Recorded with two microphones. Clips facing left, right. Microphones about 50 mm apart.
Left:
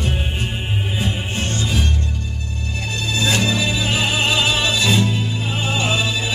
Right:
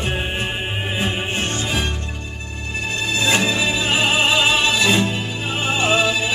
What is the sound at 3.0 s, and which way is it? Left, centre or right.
Music, right.